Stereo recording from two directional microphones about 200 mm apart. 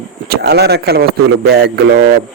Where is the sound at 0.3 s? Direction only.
55° right (ahead or behind).